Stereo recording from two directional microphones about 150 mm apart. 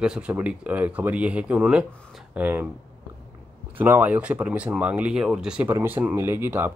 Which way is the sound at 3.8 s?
10° right (ahead or behind).